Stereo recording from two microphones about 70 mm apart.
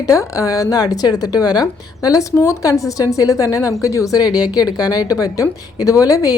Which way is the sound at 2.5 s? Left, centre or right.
Left.